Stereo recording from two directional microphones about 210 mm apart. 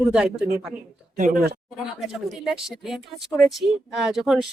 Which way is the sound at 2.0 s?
Centre (ahead or behind).